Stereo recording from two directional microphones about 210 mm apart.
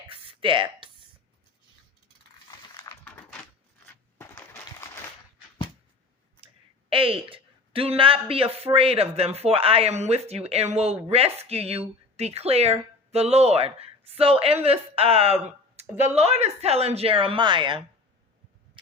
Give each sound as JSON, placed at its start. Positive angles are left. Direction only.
{"t": 0.1, "sound": "a sound", "side_deg": -25}
{"t": 2.7, "sound": "typing", "side_deg": 15}
{"t": 4.2, "sound": "typewriter", "side_deg": 15}
{"t": 6.9, "sound": "speech", "side_deg": -25}